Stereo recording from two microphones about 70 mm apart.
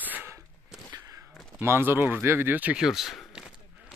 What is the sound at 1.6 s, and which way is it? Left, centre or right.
Speech, right.